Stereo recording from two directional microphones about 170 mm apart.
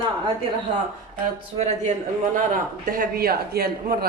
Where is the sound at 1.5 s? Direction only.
45° right (ahead or behind); by 3.9 s 65° right (ahead or behind).